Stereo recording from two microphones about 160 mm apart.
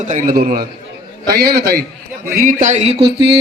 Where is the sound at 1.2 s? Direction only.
85° right.